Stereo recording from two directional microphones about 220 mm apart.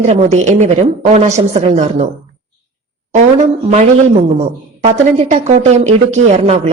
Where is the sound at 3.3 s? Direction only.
30° right (ahead or behind).